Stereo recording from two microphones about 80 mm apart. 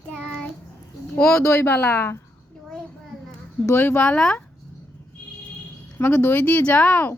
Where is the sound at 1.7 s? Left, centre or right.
Left.